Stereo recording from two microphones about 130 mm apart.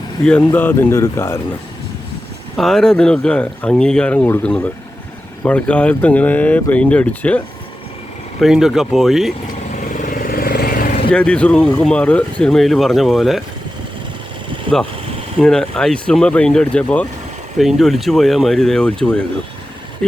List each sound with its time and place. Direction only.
0.3 s speech: 10° left (ahead or behind)
2.6 s speech: 5° left (ahead or behind)
8.4 s speech: centre (ahead or behind)
9.7 s vehicle: 85° left
11.1 s speech: 10° left (ahead or behind)
14.7 s speech: 40° right (ahead or behind)
15.4 s speech: 5° left (ahead or behind)
17.6 s speech: centre (ahead or behind)